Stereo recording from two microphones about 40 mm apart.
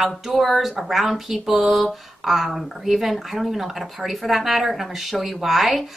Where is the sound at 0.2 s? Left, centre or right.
Centre.